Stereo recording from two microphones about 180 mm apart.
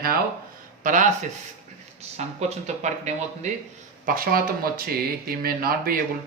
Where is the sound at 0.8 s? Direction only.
45° right (ahead or behind).